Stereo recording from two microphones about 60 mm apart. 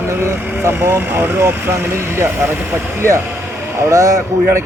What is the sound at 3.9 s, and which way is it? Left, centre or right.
Speech, right.